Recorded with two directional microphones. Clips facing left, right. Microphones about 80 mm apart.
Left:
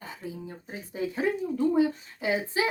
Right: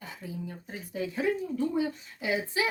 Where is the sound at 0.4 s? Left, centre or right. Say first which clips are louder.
Left 1 dB; left.